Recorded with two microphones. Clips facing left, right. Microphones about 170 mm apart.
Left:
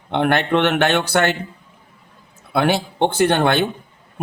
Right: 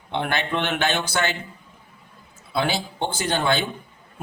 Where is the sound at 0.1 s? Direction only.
60° left (ahead or behind).